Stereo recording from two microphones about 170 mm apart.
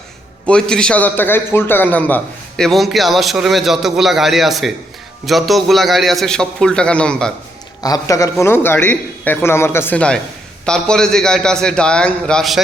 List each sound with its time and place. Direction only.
0.4 s a man's voice: 5° left (ahead or behind)
7.8 s a man's voice: 20° left (ahead or behind); by 12.5 s 5° left (ahead or behind)